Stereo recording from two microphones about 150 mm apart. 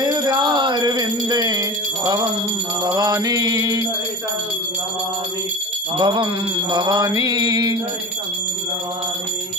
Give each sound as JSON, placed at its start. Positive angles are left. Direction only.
{"t": 0.0, "sound": "music", "side_deg": -30}
{"t": 2.8, "sound": "mantra", "side_deg": -25}
{"t": 5.9, "sound": "mantra", "side_deg": -30}